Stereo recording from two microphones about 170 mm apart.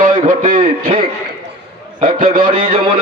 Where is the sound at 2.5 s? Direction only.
30° right (ahead or behind).